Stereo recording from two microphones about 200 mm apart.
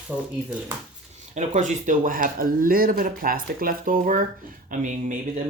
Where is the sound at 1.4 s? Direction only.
35° right (ahead or behind).